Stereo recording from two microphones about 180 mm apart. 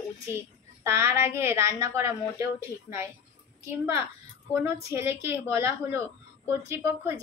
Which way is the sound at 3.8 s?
15° right (ahead or behind).